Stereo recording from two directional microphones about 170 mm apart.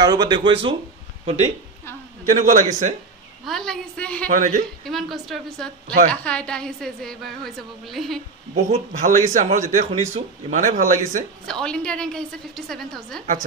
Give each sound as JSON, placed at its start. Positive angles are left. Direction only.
{"t": 0.0, "sound": "a man's voice", "side_deg": -25}
{"t": 3.4, "sound": "a woman's voice", "side_deg": 0}
{"t": 4.3, "sound": "a man's voice", "side_deg": -50}
{"t": 4.8, "sound": "a woman's voice", "side_deg": 0}
{"t": 8.6, "sound": "a man's voice", "side_deg": -45}
{"t": 11.4, "sound": "a woman's voice", "side_deg": 5}